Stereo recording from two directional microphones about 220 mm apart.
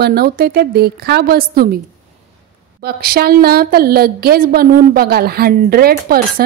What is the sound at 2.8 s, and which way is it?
A woman's voice, 45° right (ahead or behind).